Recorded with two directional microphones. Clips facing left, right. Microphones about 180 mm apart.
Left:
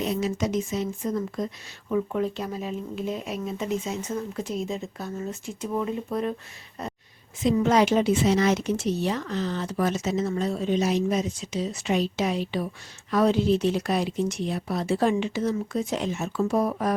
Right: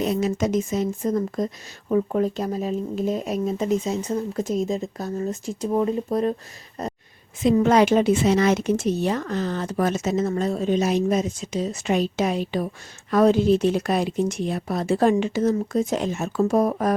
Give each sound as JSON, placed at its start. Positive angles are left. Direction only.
{"t": 0.0, "sound": "speech", "side_deg": -50}
{"t": 6.8, "sound": "a sound", "side_deg": -40}
{"t": 7.4, "sound": "speech", "side_deg": -55}